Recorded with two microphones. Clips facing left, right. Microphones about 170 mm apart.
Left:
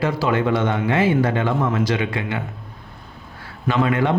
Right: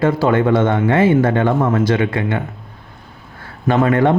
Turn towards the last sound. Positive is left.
turn(degrees=-50)  # may be behind; listen again after turning